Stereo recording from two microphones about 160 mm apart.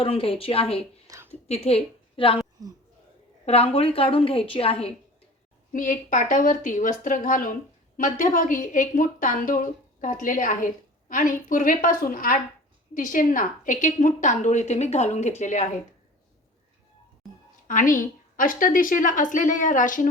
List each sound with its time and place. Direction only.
0.0 s a woman's voice: 35° left (ahead or behind)
1.0 s a sound: 20° right (ahead or behind)
1.3 s a woman's voice: 40° left (ahead or behind)
3.4 s a woman's voice: 40° left (ahead or behind)
5.7 s a woman's voice: 55° left (ahead or behind)
17.7 s a woman's voice: 55° left (ahead or behind)